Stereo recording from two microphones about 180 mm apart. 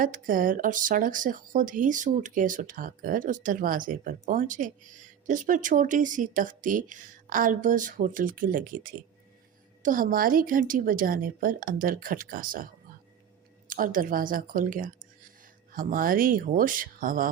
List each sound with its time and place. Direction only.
0.0 s speech: 50° right (ahead or behind)
13.7 s speech: 50° right (ahead or behind)